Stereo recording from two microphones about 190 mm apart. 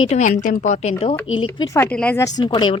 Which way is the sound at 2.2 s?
20° left (ahead or behind).